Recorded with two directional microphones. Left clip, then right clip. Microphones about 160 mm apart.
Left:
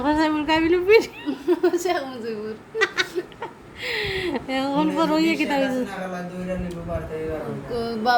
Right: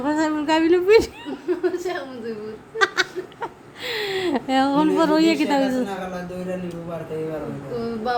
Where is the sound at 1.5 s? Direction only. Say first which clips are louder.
Left 3 dB; 75° left (ahead or behind).